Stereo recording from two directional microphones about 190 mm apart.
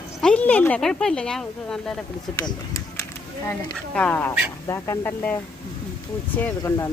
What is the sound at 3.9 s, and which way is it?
Speech, 10° left (ahead or behind).